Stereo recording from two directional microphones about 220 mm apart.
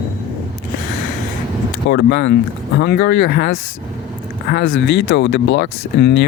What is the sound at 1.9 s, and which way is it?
Speech, 50° left (ahead or behind).